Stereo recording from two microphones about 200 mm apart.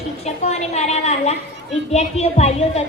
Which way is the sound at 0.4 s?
35° left (ahead or behind).